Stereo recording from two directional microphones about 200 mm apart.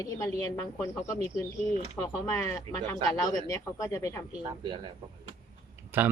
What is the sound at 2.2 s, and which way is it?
Speech, 15° left (ahead or behind).